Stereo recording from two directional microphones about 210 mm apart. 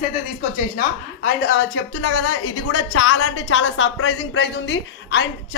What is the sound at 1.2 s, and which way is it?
A woman's voice, 60° left (ahead or behind).